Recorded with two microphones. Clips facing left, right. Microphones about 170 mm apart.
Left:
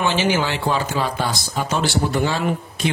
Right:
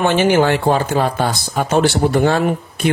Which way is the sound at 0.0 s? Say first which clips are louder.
Right 6 dB; 55° right (ahead or behind).